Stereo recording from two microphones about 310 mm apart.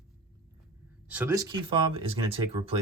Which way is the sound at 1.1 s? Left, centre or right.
Centre.